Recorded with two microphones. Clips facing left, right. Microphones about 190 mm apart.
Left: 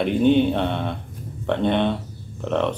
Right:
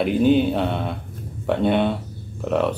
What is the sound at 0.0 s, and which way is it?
Speech, 5° right (ahead or behind).